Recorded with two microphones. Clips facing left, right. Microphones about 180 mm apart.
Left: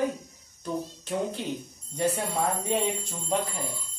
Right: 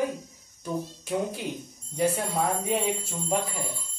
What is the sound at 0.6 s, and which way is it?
Speech, 10° right (ahead or behind).